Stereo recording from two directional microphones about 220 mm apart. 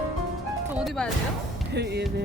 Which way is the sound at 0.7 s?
Centre (ahead or behind).